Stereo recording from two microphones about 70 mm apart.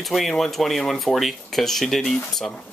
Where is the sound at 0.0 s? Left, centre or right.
Centre.